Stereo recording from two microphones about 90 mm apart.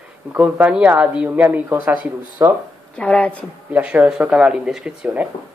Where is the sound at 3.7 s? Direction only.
15° right (ahead or behind).